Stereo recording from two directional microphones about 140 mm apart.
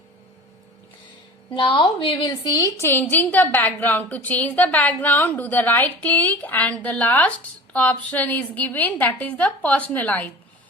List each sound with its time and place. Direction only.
1.5 s a woman's voice: 40° left (ahead or behind)
2.7 s a woman's voice: 15° left (ahead or behind)